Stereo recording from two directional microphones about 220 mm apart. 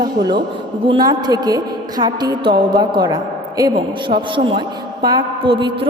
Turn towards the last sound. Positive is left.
turn(degrees=-20)  # may be behind; listen again after turning